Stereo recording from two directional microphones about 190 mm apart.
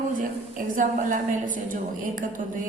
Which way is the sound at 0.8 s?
45° right (ahead or behind).